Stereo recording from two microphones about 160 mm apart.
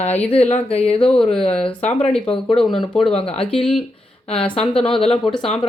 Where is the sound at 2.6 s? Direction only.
5° left (ahead or behind).